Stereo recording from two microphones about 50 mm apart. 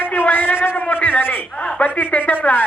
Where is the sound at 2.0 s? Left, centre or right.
Left.